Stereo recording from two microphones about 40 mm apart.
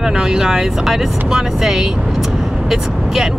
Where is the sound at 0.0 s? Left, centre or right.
Centre.